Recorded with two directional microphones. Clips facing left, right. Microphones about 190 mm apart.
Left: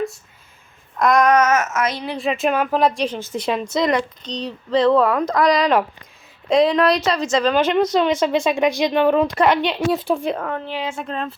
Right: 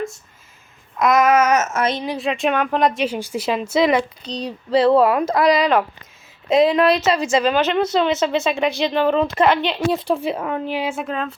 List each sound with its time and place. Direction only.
0.9 s speech: centre (ahead or behind)
1.5 s speech: 30° right (ahead or behind)
2.1 s speech: centre (ahead or behind)
8.2 s speech: 10° left (ahead or behind)
8.9 s speech: 5° left (ahead or behind)
9.9 s speech: centre (ahead or behind)